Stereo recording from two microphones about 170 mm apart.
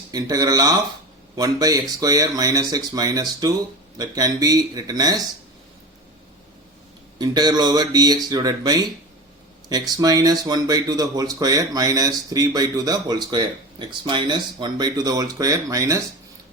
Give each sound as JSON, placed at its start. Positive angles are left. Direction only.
{"t": 0.1, "sound": "speech", "side_deg": -20}
{"t": 7.2, "sound": "speech", "side_deg": -25}